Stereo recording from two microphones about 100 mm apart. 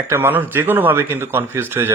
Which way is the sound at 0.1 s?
20° right (ahead or behind).